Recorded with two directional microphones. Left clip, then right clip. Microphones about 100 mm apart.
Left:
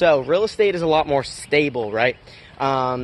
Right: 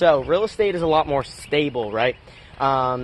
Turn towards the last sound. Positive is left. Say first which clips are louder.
# right 1 dB
turn(degrees=30)  # may be behind; listen again after turning